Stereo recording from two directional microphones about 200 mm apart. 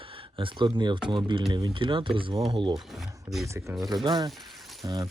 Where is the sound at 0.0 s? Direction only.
25° right (ahead or behind).